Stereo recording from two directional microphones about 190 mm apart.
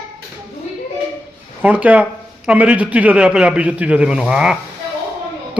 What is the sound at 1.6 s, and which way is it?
Speech, 10° right (ahead or behind).